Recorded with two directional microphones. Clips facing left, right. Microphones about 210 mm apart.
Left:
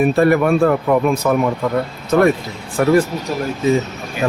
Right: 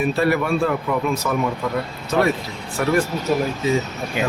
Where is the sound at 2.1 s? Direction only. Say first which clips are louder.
Left 6 dB; 45° left (ahead or behind).